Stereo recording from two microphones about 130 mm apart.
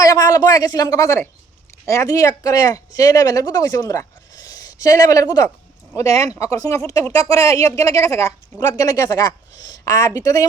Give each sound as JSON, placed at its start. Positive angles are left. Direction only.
{"t": 0.0, "sound": "speech", "side_deg": 25}